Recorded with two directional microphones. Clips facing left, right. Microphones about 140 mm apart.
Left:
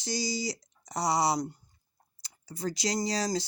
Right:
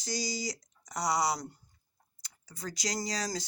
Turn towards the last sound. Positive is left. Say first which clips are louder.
# left 5 dB
turn(degrees=30)  # may be behind; listen again after turning